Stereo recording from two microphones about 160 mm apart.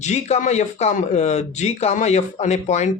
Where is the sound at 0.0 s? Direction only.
45° left (ahead or behind).